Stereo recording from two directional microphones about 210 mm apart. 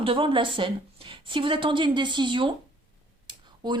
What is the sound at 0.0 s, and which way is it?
Speech, 25° right (ahead or behind).